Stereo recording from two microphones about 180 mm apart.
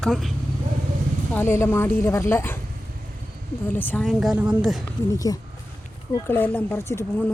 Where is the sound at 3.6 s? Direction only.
10° left (ahead or behind).